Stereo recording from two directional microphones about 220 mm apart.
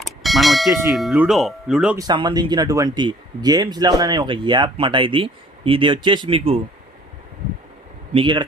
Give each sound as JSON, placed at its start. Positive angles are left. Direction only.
{"t": 0.0, "sound": "bell", "side_deg": 0}
{"t": 0.9, "sound": "speech", "side_deg": 0}
{"t": 2.0, "sound": "speech", "side_deg": -20}
{"t": 8.1, "sound": "speech", "side_deg": -20}